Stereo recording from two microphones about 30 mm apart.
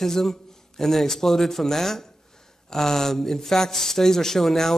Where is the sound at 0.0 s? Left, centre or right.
Centre.